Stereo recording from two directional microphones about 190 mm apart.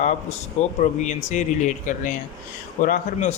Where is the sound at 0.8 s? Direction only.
40° left (ahead or behind).